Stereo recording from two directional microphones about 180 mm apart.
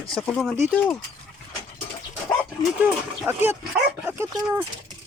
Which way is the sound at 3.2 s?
10° right (ahead or behind).